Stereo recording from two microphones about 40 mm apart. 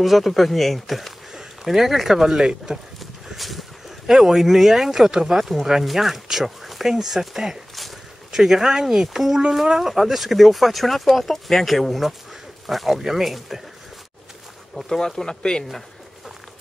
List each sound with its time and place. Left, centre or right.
0.0 s speech: centre
3.3 s a sound: centre
4.1 s speech: centre
14.8 s speech: centre